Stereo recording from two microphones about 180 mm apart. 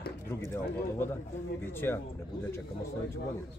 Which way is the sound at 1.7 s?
10° left (ahead or behind).